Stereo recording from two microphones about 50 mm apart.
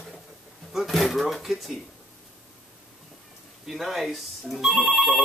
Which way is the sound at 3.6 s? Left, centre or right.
Centre.